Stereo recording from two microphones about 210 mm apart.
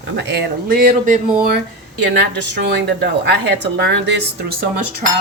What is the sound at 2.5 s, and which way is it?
Speech, 55° right (ahead or behind).